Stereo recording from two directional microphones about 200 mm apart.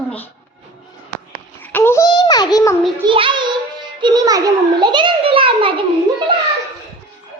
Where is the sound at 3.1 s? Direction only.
25° right (ahead or behind).